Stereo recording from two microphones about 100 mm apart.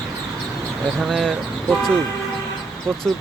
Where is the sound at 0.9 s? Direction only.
Centre (ahead or behind).